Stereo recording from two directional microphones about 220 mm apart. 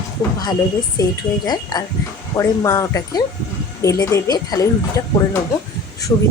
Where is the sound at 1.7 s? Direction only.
20° left (ahead or behind).